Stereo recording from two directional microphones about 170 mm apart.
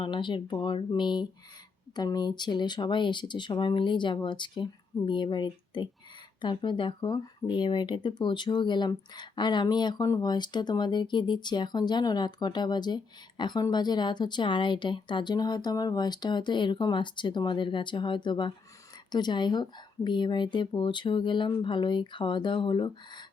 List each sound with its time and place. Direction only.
0.0 s speech: 30° left (ahead or behind)